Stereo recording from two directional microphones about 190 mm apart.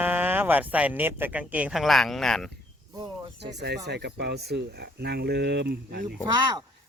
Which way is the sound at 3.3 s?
65° right (ahead or behind).